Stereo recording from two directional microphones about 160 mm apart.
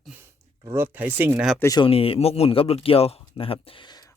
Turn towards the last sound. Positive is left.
turn(degrees=30)  # may be behind; listen again after turning